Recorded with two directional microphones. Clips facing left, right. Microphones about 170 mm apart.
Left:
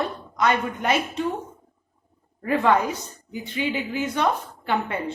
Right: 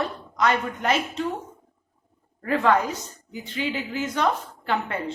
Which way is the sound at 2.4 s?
15° left (ahead or behind).